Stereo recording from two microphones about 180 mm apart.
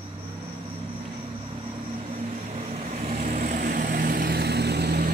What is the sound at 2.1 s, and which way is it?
Vehicle, 35° right (ahead or behind).